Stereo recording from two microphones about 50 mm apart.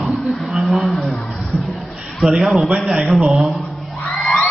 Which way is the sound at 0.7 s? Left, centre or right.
Centre.